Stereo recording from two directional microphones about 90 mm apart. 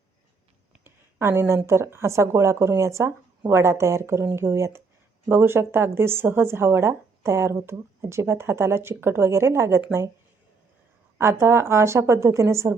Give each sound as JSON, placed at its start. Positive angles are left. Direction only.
{"t": 0.9, "sound": "speech", "side_deg": -25}
{"t": 11.2, "sound": "speech", "side_deg": -30}